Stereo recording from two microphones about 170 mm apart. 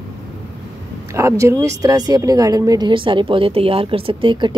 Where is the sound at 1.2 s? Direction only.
15° right (ahead or behind).